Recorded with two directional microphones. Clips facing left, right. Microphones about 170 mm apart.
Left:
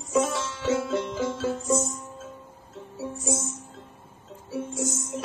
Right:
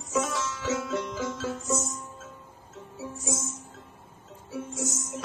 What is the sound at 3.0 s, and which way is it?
Music, 30° left (ahead or behind).